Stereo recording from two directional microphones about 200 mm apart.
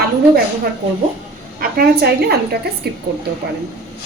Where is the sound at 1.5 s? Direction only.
50° right (ahead or behind).